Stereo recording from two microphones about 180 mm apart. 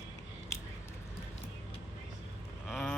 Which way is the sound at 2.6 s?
Centre (ahead or behind).